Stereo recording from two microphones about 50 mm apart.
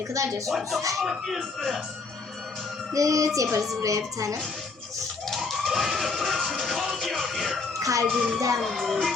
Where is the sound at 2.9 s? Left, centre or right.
Right.